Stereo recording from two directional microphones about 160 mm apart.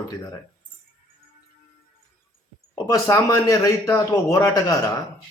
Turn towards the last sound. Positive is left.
turn(degrees=20)  # may be behind; listen again after turning